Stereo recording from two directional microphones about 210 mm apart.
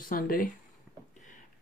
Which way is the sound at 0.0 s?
40° left (ahead or behind).